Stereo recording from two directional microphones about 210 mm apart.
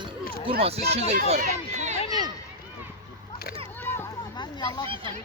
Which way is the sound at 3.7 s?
10° left (ahead or behind).